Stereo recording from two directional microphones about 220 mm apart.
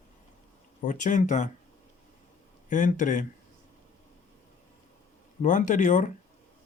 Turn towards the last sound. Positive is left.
turn(degrees=35)  # may be behind; listen again after turning